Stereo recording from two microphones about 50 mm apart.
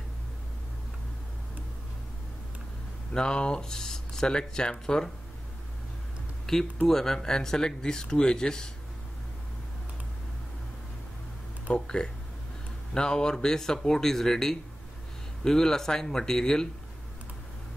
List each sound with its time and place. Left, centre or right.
3.1 s speech: centre
6.4 s speech: centre
11.6 s speech: centre